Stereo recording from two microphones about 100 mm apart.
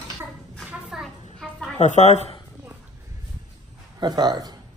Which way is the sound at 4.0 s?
45° right (ahead or behind).